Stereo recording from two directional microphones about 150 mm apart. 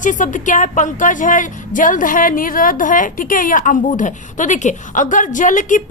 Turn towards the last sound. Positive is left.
turn(degrees=60)  # may be behind; listen again after turning